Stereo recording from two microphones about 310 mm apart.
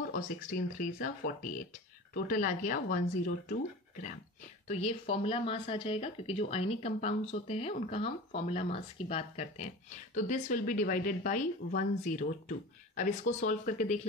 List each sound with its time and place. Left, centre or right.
0.1 s speech: left
4.6 s speech: left